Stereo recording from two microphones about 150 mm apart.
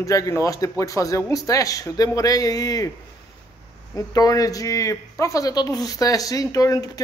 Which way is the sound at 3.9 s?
25° left (ahead or behind).